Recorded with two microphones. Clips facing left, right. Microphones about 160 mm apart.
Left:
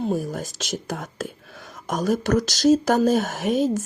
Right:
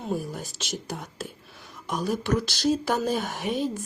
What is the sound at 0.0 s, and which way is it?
Speech, 40° left (ahead or behind).